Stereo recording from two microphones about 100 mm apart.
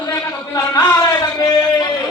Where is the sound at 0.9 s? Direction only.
45° left (ahead or behind).